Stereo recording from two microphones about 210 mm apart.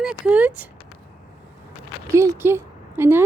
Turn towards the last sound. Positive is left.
turn(degrees=-10)  # may be behind; listen again after turning